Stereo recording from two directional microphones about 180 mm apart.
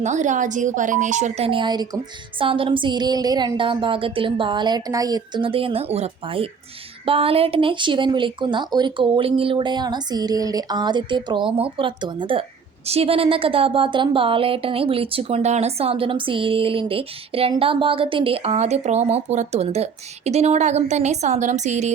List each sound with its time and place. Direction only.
0.0 s speech: 40° right (ahead or behind)